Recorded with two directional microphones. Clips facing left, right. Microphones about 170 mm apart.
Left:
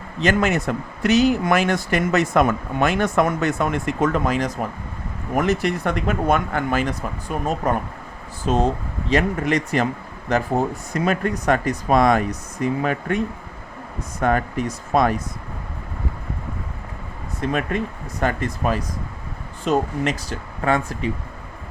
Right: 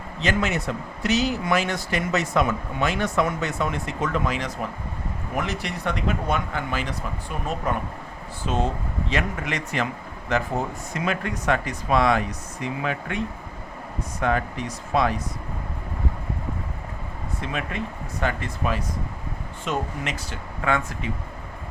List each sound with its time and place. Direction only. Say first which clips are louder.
0.2 s speech: left 5 dB; 50° left (ahead or behind)
17.4 s speech: left 8 dB; 45° left (ahead or behind)